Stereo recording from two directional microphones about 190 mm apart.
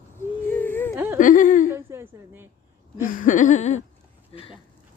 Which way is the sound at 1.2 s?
45° left (ahead or behind).